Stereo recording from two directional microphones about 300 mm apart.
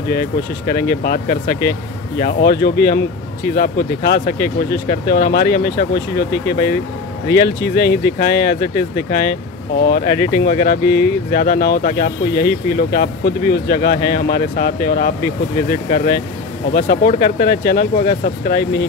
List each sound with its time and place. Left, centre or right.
0.1 s speech: left
7.3 s speech: left
16.7 s speech: left